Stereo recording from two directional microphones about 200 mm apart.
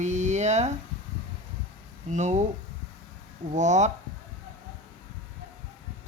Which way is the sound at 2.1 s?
35° right (ahead or behind).